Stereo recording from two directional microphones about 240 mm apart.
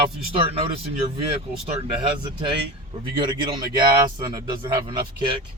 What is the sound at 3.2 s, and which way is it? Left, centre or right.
Speech, centre.